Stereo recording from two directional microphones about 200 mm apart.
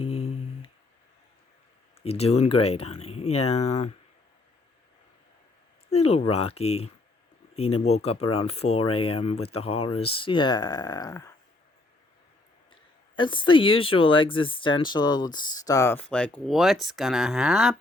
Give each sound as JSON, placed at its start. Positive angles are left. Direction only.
{"t": 0.0, "sound": "a sound", "side_deg": 30}
{"t": 2.0, "sound": "speech", "side_deg": 30}
{"t": 5.9, "sound": "speech", "side_deg": 30}
{"t": 13.1, "sound": "speech", "side_deg": 25}